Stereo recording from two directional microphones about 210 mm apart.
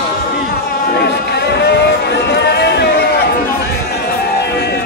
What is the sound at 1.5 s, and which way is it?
Music, 50° left (ahead or behind).